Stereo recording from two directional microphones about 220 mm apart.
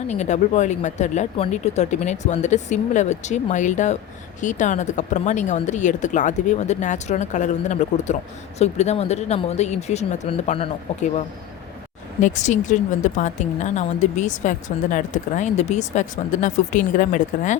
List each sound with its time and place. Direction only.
0.1 s speech: 30° left (ahead or behind)
12.2 s speech: 35° left (ahead or behind)